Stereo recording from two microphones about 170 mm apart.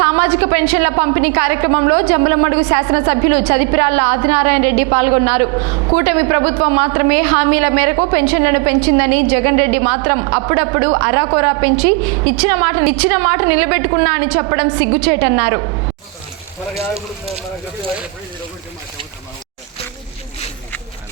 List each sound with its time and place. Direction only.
0.0 s a woman's voice: 15° right (ahead or behind)
5.5 s a woman's voice: 30° right (ahead or behind)
6.0 s a woman's voice: 15° right (ahead or behind)